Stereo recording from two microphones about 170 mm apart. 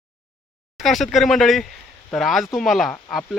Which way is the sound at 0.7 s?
Centre (ahead or behind).